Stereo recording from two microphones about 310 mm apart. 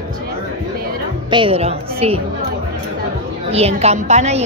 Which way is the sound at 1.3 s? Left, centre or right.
Centre.